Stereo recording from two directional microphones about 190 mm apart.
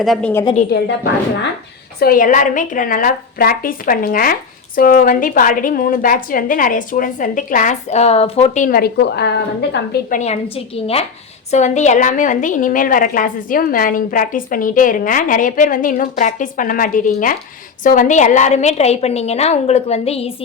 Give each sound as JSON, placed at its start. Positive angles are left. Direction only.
{"t": 0.0, "sound": "a woman's voice", "side_deg": 5}
{"t": 0.7, "sound": "a woman's voice", "side_deg": 55}
{"t": 2.0, "sound": "a woman's voice", "side_deg": 50}
{"t": 10.1, "sound": "a woman's voice", "side_deg": 35}